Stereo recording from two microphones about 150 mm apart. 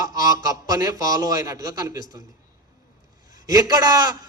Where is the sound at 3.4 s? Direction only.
25° right (ahead or behind).